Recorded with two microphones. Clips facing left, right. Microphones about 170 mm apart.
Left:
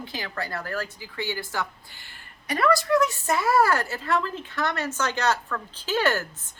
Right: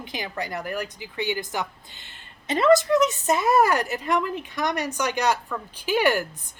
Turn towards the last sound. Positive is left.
turn(degrees=-15)  # may be behind; listen again after turning